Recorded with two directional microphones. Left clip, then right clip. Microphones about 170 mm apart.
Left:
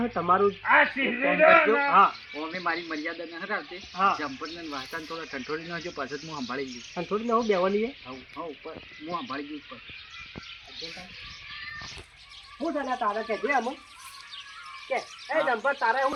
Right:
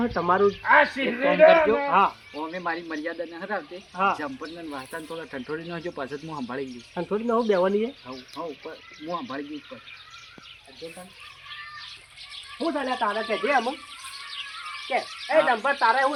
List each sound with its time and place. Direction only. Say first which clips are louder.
0.0 s speech: right 2 dB; 20° right (ahead or behind)
0.8 s a man's voice: right 2 dB; centre (ahead or behind)
1.9 s speech: left 1 dB; 25° right (ahead or behind)
2.6 s speech: left 1 dB; 40° right (ahead or behind)
3.9 s speech: even; 15° right (ahead or behind)
4.9 s speech: even; 30° right (ahead or behind)
12.5 s speech: right 3 dB; 15° right (ahead or behind)
14.8 s speech: right 4 dB; 35° right (ahead or behind)